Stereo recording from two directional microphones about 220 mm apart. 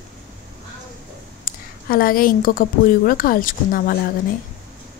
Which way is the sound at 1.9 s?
40° left (ahead or behind).